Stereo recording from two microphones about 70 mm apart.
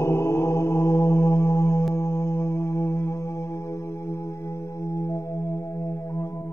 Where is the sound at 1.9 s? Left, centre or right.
Left.